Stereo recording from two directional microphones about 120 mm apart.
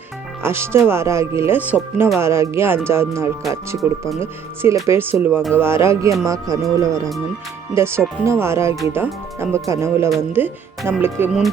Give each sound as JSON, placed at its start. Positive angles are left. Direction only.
{"t": 0.4, "sound": "speech", "side_deg": -20}